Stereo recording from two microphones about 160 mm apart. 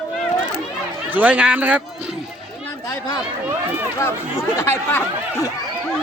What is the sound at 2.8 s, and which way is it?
Speech, 25° left (ahead or behind).